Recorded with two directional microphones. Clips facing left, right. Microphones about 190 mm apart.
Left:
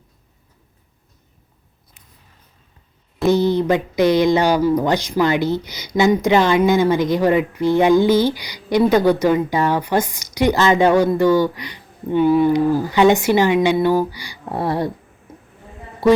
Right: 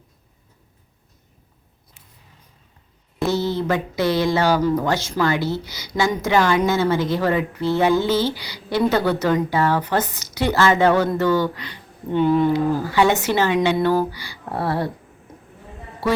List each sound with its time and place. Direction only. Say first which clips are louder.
3.2 s speech: left 6 dB; 15° left (ahead or behind)
16.0 s speech: left 8 dB; 15° left (ahead or behind)